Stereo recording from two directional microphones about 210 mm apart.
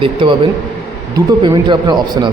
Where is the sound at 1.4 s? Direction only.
20° right (ahead or behind).